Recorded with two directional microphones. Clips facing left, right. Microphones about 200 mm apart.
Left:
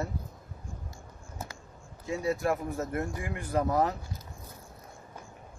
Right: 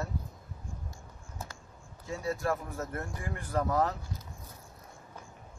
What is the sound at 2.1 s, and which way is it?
Speech, 15° left (ahead or behind).